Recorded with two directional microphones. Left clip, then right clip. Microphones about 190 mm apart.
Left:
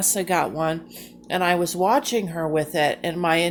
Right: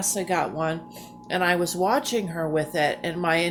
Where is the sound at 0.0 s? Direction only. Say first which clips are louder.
Left 3 dB; 30° left (ahead or behind).